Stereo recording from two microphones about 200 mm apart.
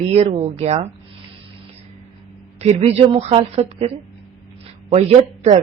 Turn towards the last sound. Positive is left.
turn(degrees=-30)  # may be behind; listen again after turning